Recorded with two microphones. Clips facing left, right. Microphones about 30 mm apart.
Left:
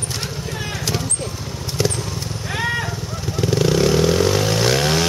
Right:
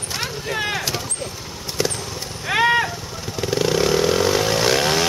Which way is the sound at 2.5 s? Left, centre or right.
Right.